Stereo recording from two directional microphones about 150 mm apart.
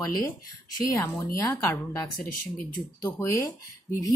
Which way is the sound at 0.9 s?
20° left (ahead or behind).